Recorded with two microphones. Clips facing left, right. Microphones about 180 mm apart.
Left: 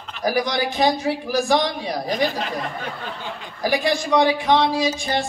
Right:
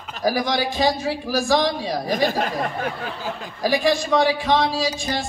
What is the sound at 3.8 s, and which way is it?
Speech, 20° left (ahead or behind).